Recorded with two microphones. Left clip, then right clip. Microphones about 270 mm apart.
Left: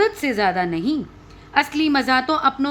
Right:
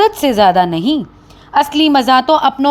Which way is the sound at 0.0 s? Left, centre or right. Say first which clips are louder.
Right 9 dB; right.